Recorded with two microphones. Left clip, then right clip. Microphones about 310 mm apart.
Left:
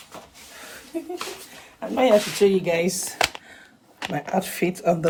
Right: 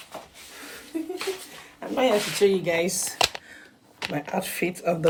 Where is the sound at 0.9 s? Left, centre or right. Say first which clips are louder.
Even; centre.